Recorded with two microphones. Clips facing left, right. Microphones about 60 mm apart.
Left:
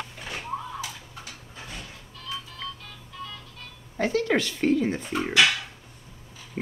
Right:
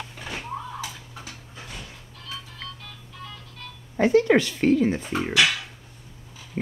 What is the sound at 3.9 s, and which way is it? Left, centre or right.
Speech, right.